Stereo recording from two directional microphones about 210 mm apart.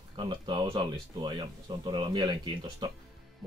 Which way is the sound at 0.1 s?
25° right (ahead or behind).